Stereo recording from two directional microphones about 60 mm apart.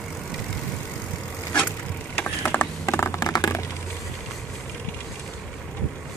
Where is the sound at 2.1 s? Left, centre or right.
Left.